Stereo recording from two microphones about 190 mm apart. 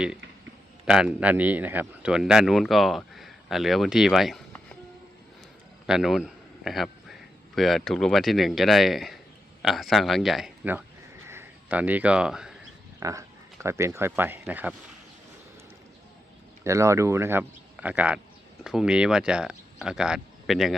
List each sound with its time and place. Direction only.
0.9 s speech: 5° right (ahead or behind)
5.8 s a man's voice: centre (ahead or behind)
11.3 s a sound: 10° right (ahead or behind)
13.0 s speech: 15° right (ahead or behind)
16.6 s speech: 15° right (ahead or behind)